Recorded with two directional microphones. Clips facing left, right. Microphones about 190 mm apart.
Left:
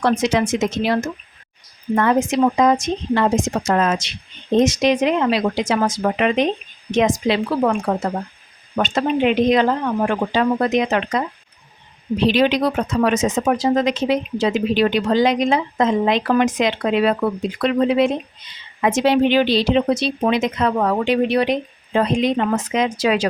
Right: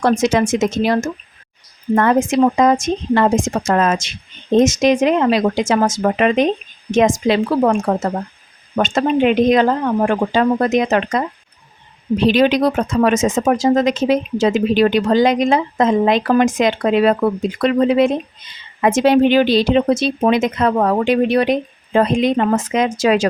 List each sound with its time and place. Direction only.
0.0 s speech: 45° right (ahead or behind)
2.3 s speech: 50° right (ahead or behind)
12.3 s speech: 45° right (ahead or behind)